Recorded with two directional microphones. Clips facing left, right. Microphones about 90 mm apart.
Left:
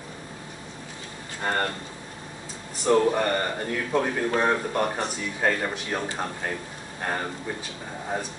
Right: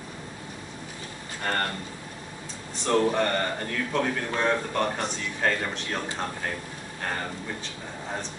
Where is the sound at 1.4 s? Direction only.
15° left (ahead or behind).